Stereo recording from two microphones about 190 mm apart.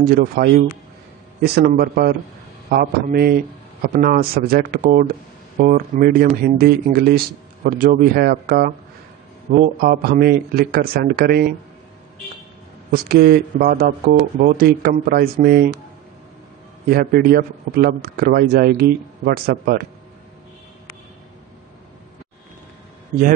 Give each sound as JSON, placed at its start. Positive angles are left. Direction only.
{"t": 0.0, "sound": "a man's voice", "side_deg": -55}
{"t": 12.9, "sound": "speech", "side_deg": -55}
{"t": 16.9, "sound": "speech", "side_deg": -55}